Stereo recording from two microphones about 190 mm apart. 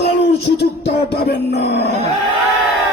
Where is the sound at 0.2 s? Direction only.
55° left (ahead or behind).